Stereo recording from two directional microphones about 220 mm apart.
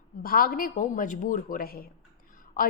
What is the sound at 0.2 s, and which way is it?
A woman's voice, 40° left (ahead or behind).